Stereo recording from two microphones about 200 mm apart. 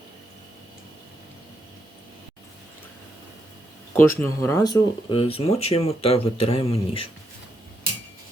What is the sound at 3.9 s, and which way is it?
Speech, 10° left (ahead or behind).